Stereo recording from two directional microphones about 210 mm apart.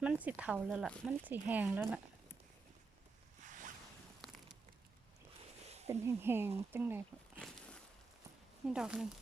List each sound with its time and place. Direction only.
0.0 s speech: 5° right (ahead or behind)
3.4 s zipper: 35° right (ahead or behind)
5.6 s a sound: 30° right (ahead or behind)
5.9 s speech: 10° right (ahead or behind)
7.3 s a sound: 5° left (ahead or behind)
8.6 s speech: 5° right (ahead or behind)